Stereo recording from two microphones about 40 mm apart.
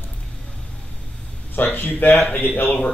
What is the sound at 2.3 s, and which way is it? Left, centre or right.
Speech, left.